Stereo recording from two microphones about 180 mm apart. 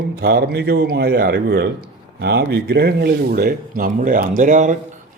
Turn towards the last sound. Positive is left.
turn(degrees=-45)  # may be behind; listen again after turning